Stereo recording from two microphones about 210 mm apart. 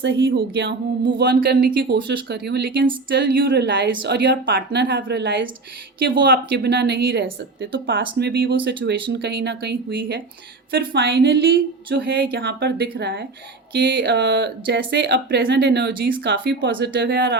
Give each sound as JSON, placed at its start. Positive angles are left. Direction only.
{"t": 0.0, "sound": "speech", "side_deg": -55}